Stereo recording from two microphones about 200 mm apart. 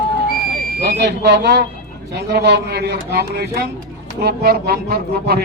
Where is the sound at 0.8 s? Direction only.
55° right (ahead or behind).